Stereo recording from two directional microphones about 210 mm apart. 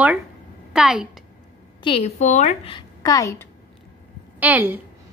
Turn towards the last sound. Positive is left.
turn(degrees=-10)  # may be behind; listen again after turning